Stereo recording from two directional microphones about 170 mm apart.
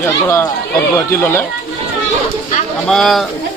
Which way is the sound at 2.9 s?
Centre (ahead or behind).